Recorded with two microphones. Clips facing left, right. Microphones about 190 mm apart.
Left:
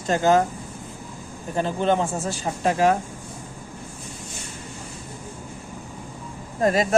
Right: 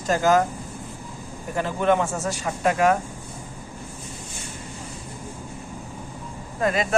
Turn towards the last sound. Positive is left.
turn(degrees=35)  # may be behind; listen again after turning